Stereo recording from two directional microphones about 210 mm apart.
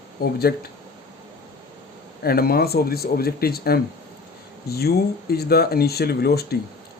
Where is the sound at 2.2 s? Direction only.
45° left (ahead or behind).